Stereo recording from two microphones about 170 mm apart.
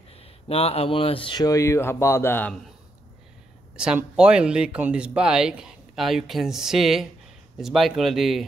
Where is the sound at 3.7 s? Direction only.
5° right (ahead or behind).